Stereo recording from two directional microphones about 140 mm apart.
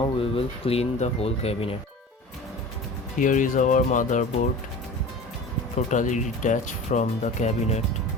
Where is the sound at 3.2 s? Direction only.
70° left (ahead or behind).